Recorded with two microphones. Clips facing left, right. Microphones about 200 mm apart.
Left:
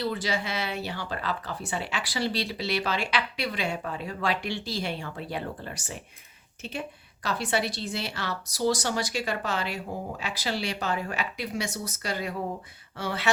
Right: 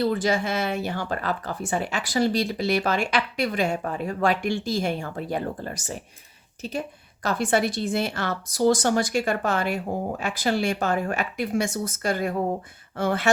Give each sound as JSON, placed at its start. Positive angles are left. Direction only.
{"t": 0.0, "sound": "speech", "side_deg": -50}